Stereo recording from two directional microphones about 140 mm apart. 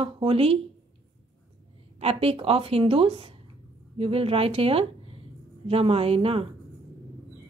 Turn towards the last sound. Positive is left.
turn(degrees=-40)  # may be behind; listen again after turning